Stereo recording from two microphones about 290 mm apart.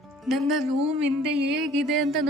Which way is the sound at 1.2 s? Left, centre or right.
Right.